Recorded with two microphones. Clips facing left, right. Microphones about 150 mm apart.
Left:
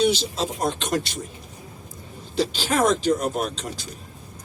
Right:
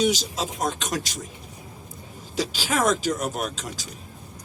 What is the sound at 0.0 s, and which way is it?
Speech, 45° right (ahead or behind).